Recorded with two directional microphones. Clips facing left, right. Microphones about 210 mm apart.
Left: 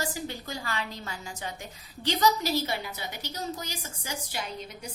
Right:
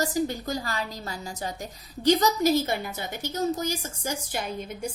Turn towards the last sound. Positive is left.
turn(degrees=-50)  # may be behind; listen again after turning